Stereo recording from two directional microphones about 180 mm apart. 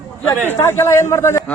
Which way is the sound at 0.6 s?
15° left (ahead or behind).